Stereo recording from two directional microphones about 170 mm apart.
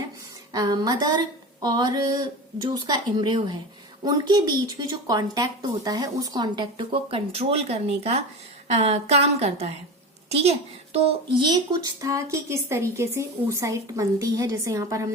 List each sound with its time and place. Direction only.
0.5 s a woman's voice: 25° right (ahead or behind)
11.4 s speech: 25° right (ahead or behind)